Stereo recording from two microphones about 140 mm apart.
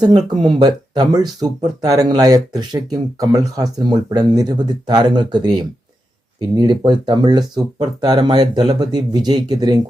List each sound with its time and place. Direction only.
0.3 s speech: 30° right (ahead or behind)